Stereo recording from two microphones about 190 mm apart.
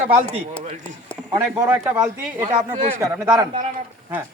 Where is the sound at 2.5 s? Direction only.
35° right (ahead or behind).